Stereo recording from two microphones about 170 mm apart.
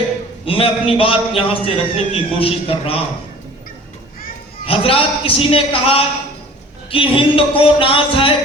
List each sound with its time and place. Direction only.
0.4 s a man's voice: 35° left (ahead or behind)
4.6 s a man's voice: 35° left (ahead or behind)